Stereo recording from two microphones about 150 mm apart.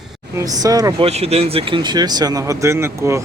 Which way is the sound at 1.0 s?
45° right (ahead or behind).